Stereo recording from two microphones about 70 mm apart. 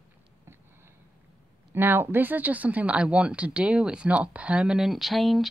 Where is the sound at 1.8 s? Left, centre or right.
Right.